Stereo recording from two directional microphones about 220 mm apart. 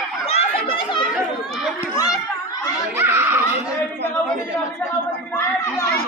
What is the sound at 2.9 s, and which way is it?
Giggle, 10° right (ahead or behind).